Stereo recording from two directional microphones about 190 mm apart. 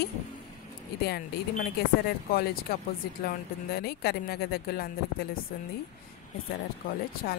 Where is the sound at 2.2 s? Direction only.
50° left (ahead or behind).